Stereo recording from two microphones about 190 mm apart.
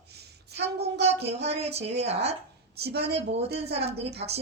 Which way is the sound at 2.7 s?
55° right (ahead or behind).